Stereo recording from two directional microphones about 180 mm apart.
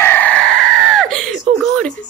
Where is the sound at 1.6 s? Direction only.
5° left (ahead or behind).